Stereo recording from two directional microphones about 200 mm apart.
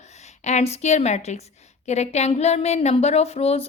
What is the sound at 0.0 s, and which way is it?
A woman's voice, 35° left (ahead or behind).